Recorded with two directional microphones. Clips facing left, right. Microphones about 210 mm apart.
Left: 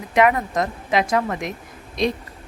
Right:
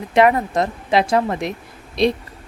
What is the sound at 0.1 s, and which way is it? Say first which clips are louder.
Speech: right 3 dB; 30° right (ahead or behind).